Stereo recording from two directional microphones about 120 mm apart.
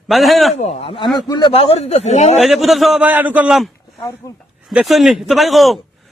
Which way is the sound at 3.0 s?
15° right (ahead or behind).